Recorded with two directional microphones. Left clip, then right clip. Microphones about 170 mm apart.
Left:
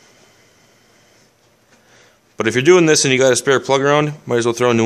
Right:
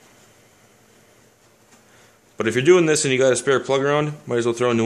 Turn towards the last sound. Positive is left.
turn(degrees=30)  # may be behind; listen again after turning